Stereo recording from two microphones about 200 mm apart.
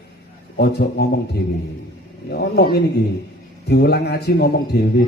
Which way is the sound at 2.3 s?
50° left (ahead or behind).